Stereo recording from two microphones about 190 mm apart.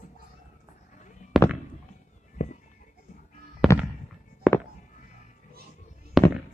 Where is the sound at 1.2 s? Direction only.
40° left (ahead or behind).